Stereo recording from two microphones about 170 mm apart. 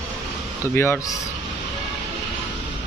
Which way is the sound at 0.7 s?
10° left (ahead or behind).